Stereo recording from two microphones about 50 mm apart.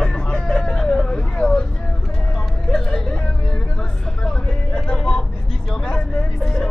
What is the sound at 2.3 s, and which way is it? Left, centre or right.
Hubbub, centre.